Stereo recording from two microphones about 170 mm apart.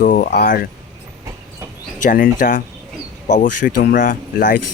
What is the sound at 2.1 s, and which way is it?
Speech, 55° left (ahead or behind).